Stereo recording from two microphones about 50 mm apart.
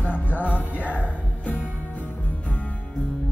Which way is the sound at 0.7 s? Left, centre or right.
Right.